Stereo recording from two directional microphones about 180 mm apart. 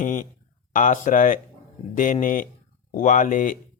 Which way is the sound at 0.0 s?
45° left (ahead or behind).